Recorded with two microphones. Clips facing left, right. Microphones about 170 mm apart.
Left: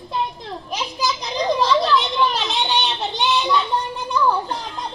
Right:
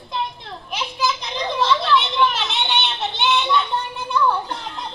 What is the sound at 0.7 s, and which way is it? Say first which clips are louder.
Children playing: right 1 dB; 40° left (ahead or behind).